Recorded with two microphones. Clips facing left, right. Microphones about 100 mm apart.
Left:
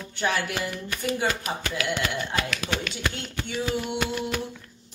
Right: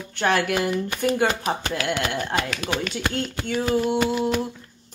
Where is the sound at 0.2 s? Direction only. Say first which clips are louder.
Right 5 dB; 55° right (ahead or behind).